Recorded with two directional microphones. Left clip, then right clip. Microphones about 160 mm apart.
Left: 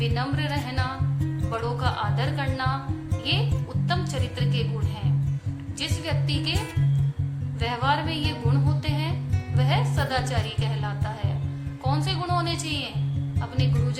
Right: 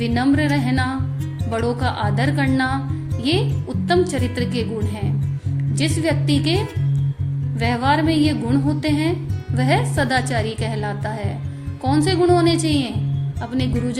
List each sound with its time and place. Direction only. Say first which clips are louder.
0.0 s speech: right 9 dB; 25° right (ahead or behind)
5.8 s speech: right 9 dB; 30° right (ahead or behind)
7.6 s speech: right 6 dB; 30° right (ahead or behind)